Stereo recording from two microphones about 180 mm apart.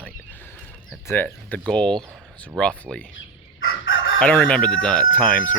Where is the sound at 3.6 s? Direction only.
90° left.